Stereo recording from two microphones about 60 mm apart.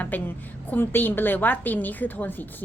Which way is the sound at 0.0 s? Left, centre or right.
Left.